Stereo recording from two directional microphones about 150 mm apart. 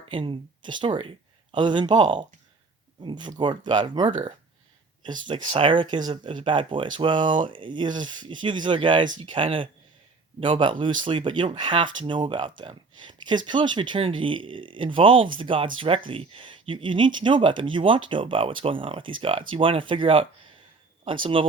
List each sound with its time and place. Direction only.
0.1 s speech: 35° right (ahead or behind)